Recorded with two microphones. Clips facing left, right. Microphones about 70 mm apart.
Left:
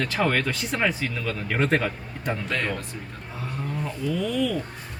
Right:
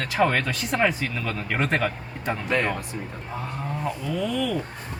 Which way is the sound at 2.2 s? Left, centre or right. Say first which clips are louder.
Right 3 dB; centre.